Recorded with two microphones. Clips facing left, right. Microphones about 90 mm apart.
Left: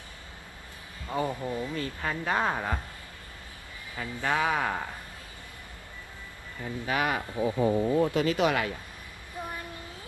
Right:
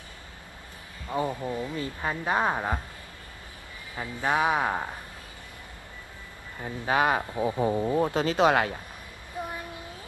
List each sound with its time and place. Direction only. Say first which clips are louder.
1.0 s speech: right 1 dB; 15° right (ahead or behind)
3.9 s speech: right 2 dB; 20° right (ahead or behind)
6.6 s speech: right 4 dB; 25° right (ahead or behind)
9.5 s a sound: right 2 dB; 20° right (ahead or behind)